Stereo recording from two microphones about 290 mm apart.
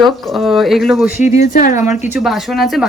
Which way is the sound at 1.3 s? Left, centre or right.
Left.